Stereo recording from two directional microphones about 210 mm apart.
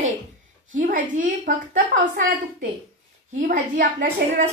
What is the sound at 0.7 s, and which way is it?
A woman's voice, 40° right (ahead or behind).